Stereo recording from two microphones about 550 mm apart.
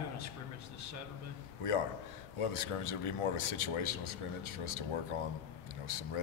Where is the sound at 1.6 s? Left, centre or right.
Left.